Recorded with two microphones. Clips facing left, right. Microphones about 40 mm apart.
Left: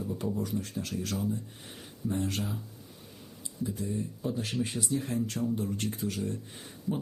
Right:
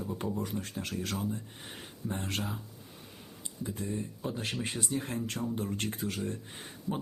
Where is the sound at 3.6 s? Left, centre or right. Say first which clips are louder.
Left 3 dB; right.